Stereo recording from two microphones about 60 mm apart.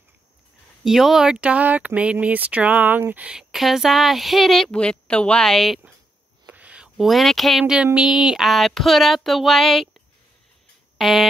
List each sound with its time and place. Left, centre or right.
0.8 s speech: centre; by 3.3 s right
3.3 s speech: centre
4.7 s a woman's voice: centre
5.4 s speech: centre
6.4 s a sound: right
7.0 s speech: centre
7.6 s speech: centre
11.0 s a sound: centre